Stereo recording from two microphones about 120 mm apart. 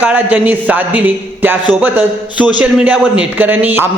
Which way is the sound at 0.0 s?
15° right (ahead or behind).